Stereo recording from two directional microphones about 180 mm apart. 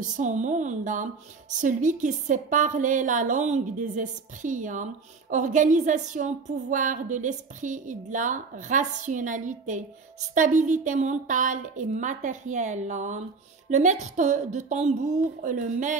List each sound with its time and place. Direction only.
0.2 s a woman's voice: 45° right (ahead or behind)